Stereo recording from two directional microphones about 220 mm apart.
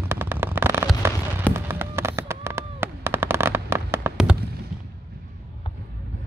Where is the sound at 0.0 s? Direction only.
10° right (ahead or behind).